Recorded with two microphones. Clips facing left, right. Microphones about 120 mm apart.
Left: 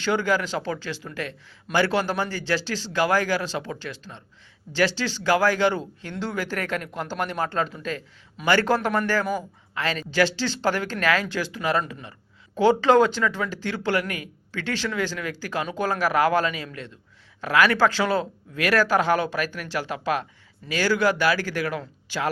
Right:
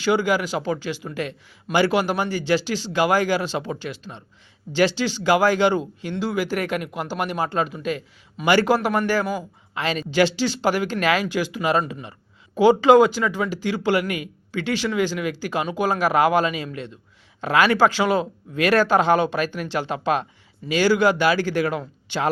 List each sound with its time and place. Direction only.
0.0 s speech: 10° right (ahead or behind)